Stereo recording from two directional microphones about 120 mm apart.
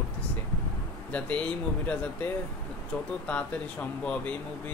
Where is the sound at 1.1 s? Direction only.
10° left (ahead or behind).